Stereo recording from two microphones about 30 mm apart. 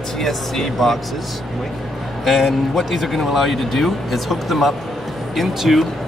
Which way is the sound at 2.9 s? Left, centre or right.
Centre.